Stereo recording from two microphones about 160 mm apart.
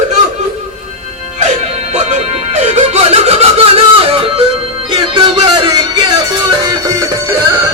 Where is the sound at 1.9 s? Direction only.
45° right (ahead or behind); by 7.6 s 20° right (ahead or behind).